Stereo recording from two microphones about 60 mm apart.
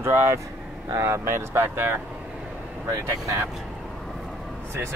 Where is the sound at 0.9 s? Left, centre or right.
Right.